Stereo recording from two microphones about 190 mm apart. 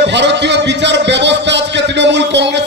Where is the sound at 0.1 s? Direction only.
65° right (ahead or behind).